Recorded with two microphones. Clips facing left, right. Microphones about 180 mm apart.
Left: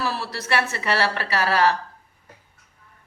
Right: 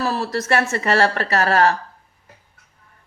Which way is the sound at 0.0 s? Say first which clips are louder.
Right 6 dB; 45° right (ahead or behind).